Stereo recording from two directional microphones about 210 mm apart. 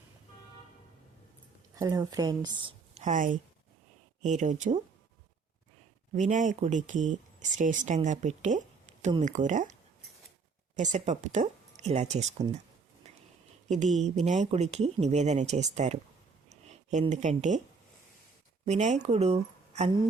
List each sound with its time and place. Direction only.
1.7 s a woman's voice: 15° right (ahead or behind); by 4.8 s 35° right (ahead or behind)
6.1 s speech: 35° right (ahead or behind)
10.8 s speech: 35° right (ahead or behind)
13.7 s speech: 35° right (ahead or behind)
16.5 s a sound: 35° right (ahead or behind)
18.6 s speech: 30° right (ahead or behind)